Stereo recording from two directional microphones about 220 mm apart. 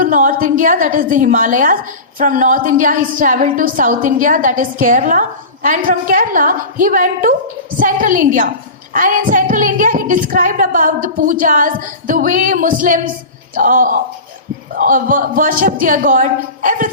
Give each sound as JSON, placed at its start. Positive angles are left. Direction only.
{"t": 0.0, "sound": "a woman's voice", "side_deg": -40}